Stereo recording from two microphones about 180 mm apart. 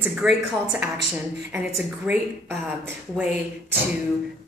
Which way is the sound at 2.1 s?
5° right (ahead or behind).